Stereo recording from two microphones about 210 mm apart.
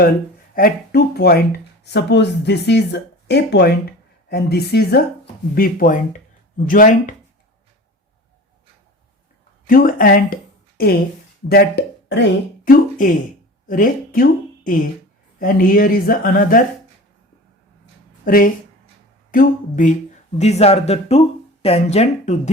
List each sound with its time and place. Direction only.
0.5 s speech: 45° left (ahead or behind)
9.6 s a woman's voice: 40° left (ahead or behind)
13.7 s speech: 40° left (ahead or behind)
18.3 s speech: 45° left (ahead or behind)